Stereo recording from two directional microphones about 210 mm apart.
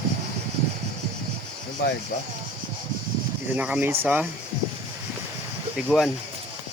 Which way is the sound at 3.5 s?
5° right (ahead or behind).